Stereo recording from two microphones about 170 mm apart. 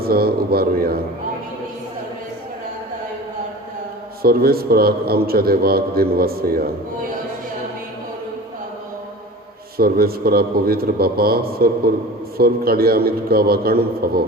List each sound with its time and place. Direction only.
0.0 s a man's voice: 65° right (ahead or behind)
4.2 s a man's voice: 60° right (ahead or behind)
9.7 s a man's voice: 65° right (ahead or behind)